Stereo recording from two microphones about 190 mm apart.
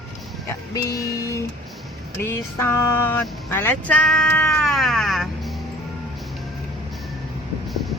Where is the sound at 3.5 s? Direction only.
10° left (ahead or behind).